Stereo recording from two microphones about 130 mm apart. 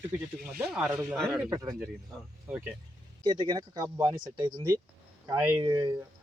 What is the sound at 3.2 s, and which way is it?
Speech, 35° right (ahead or behind).